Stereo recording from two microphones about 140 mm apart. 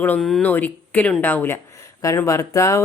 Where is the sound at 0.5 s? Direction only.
10° left (ahead or behind).